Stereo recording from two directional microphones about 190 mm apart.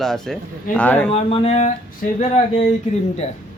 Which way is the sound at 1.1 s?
30° left (ahead or behind).